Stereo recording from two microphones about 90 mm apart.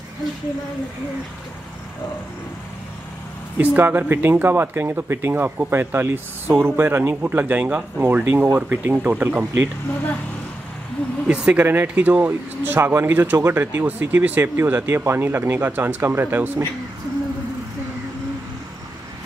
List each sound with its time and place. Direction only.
3.5 s speech: 20° right (ahead or behind)
11.2 s speech: 10° right (ahead or behind)